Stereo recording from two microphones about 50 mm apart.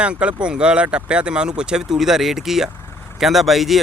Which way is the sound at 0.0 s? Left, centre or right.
Right.